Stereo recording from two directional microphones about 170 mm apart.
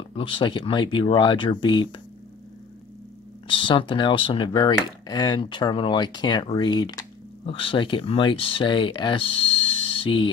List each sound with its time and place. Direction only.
0.1 s speech: 30° left (ahead or behind)
3.4 s speech: 30° left (ahead or behind)